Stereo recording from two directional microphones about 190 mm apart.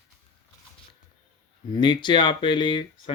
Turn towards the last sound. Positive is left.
turn(degrees=25)  # may be behind; listen again after turning